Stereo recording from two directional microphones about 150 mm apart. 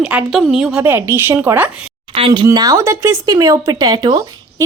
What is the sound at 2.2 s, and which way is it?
Speech, 35° right (ahead or behind).